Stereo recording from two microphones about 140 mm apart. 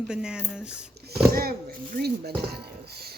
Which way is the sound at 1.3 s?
90° right.